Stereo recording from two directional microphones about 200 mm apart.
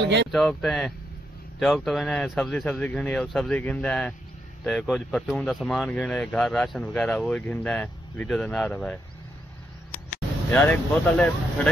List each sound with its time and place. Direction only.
0.0 s speech: 60° right (ahead or behind)
0.3 s speech: centre (ahead or behind)
9.9 s speech: 10° left (ahead or behind)